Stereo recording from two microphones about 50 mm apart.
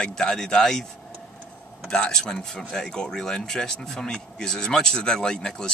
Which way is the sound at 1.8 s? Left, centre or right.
Centre.